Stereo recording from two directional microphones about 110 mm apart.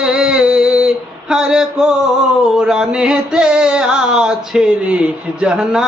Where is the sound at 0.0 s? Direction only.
5° right (ahead or behind).